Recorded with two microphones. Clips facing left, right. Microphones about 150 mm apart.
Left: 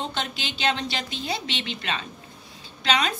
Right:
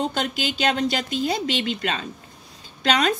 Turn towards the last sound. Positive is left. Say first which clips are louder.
# right 4 dB
turn(degrees=-45)  # may be behind; listen again after turning